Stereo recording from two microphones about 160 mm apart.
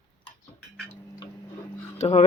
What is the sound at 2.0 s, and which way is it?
Speech, 40° left (ahead or behind).